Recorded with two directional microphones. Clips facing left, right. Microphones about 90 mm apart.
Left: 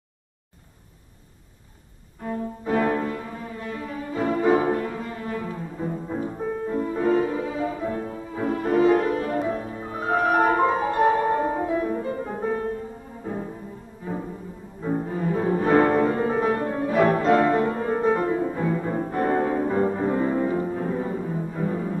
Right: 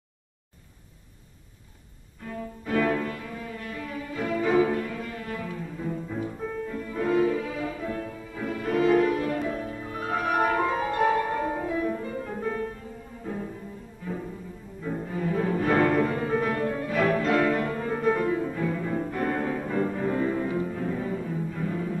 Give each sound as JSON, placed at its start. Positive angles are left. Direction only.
{"t": 2.2, "sound": "music", "side_deg": 30}
{"t": 14.0, "sound": "music", "side_deg": 25}
{"t": 14.8, "sound": "cello", "side_deg": 30}